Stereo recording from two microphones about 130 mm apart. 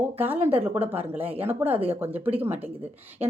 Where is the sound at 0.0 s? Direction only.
15° right (ahead or behind).